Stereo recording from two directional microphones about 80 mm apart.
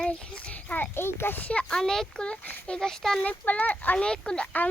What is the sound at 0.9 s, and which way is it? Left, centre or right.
A child's voice, left.